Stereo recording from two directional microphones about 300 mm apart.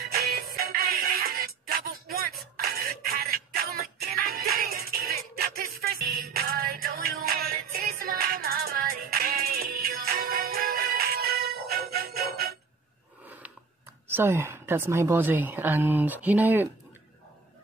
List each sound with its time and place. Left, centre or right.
0.0 s music: right
14.0 s a woman's voice: centre